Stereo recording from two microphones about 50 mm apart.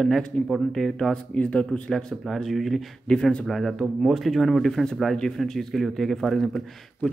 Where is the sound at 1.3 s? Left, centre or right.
Left.